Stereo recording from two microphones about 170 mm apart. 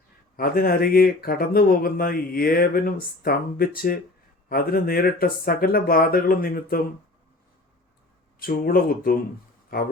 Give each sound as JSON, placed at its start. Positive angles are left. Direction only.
{"t": 0.3, "sound": "speech", "side_deg": 60}
{"t": 8.4, "sound": "speech", "side_deg": 60}